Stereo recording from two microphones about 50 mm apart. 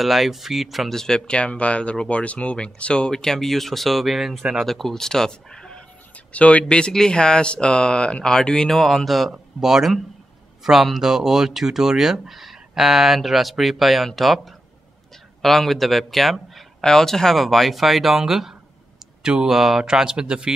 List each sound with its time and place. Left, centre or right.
0.0 s speech: centre
6.1 s a sound: left
6.9 s speech: centre
9.3 s speech: centre